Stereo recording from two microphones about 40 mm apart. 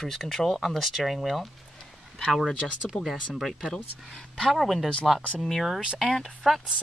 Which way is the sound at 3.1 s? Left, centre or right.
Centre.